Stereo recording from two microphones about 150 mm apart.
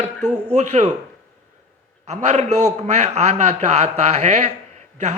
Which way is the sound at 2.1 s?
50° right (ahead or behind).